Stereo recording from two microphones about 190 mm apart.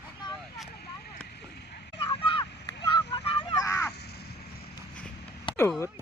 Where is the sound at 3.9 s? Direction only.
60° left (ahead or behind).